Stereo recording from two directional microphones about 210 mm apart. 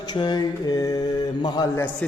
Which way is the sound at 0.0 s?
20° left (ahead or behind).